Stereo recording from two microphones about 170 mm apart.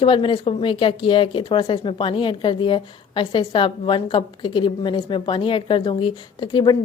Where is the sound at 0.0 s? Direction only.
30° left (ahead or behind).